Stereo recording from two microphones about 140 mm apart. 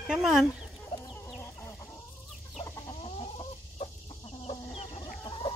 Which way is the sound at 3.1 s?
40° left (ahead or behind).